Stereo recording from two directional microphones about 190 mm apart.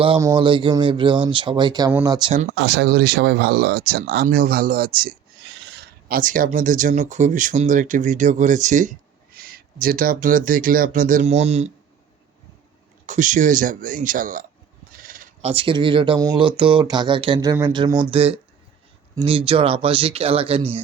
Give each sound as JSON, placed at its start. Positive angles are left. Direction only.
{"t": 0.2, "sound": "speech", "side_deg": -20}
{"t": 2.6, "sound": "speech", "side_deg": -60}
{"t": 5.5, "sound": "speech", "side_deg": -70}
{"t": 13.1, "sound": "speech", "side_deg": -40}
{"t": 14.9, "sound": "bleat", "side_deg": -45}
{"t": 15.4, "sound": "speech", "side_deg": -30}